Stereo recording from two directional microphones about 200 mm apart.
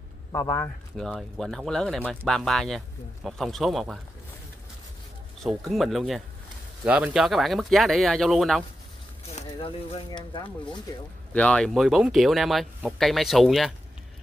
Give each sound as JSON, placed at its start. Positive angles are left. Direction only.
{"t": 0.3, "sound": "speech", "side_deg": 15}
{"t": 0.9, "sound": "speech", "side_deg": 0}
{"t": 5.4, "sound": "speech", "side_deg": 0}
{"t": 9.3, "sound": "speech", "side_deg": 30}
{"t": 11.3, "sound": "speech", "side_deg": 5}